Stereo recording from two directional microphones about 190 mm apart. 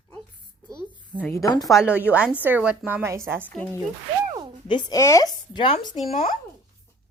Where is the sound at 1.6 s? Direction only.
5° right (ahead or behind).